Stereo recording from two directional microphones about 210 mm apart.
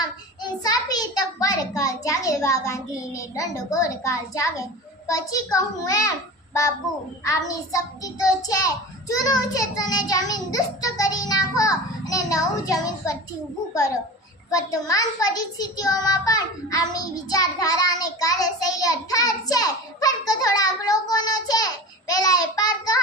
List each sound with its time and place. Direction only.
0.6 s a child's voice: 20° left (ahead or behind)
5.0 s child singing: 15° left (ahead or behind)
14.5 s child singing: 15° left (ahead or behind)